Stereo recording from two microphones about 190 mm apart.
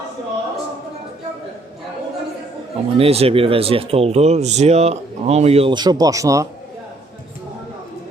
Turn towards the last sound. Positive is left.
turn(degrees=-15)  # may be behind; listen again after turning